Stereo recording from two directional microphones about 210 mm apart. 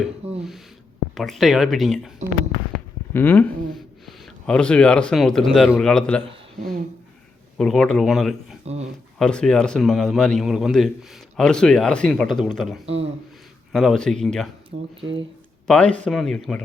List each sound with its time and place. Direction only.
0.2 s a sound: 30° right (ahead or behind)
1.1 s a man's voice: centre (ahead or behind)
2.2 s speech: 35° right (ahead or behind)
2.7 s a man's voice: 10° left (ahead or behind)
8.6 s speech: 30° right (ahead or behind)
9.1 s a man's voice: 5° left (ahead or behind)
12.8 s a man's voice: 30° right (ahead or behind)
13.7 s a man's voice: centre (ahead or behind)
15.6 s a man's voice: 5° left (ahead or behind)